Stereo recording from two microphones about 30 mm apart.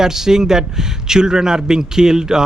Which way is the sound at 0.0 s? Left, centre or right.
Centre.